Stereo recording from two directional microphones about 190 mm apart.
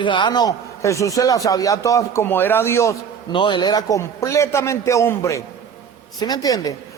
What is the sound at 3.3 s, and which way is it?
A man's voice, 25° left (ahead or behind).